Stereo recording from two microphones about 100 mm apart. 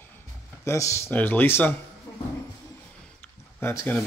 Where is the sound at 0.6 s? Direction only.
30° left (ahead or behind).